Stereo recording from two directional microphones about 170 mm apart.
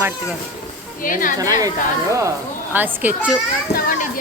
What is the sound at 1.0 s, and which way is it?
Speech, 55° left (ahead or behind).